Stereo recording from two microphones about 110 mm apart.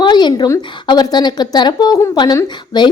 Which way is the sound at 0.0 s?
40° left (ahead or behind).